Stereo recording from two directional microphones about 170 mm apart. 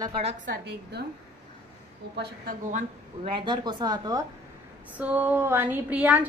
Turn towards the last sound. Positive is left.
turn(degrees=-10)  # may be behind; listen again after turning